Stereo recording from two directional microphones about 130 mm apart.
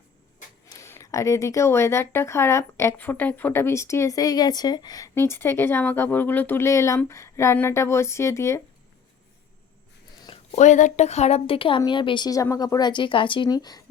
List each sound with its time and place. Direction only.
0.7 s speech: 20° left (ahead or behind)
10.5 s a woman's voice: 65° left (ahead or behind); by 13.8 s 30° left (ahead or behind)